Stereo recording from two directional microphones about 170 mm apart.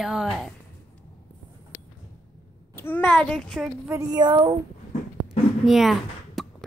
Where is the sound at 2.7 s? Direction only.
10° left (ahead or behind).